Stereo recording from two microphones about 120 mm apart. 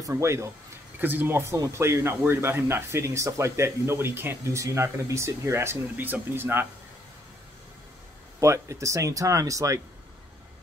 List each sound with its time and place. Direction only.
0.0 s speech: 25° right (ahead or behind)
8.4 s speech: 25° right (ahead or behind)